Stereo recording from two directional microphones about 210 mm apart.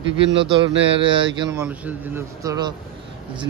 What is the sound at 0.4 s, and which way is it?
Speech, 20° right (ahead or behind).